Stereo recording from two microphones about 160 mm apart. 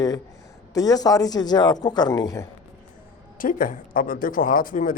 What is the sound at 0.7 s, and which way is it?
Speech, 25° left (ahead or behind).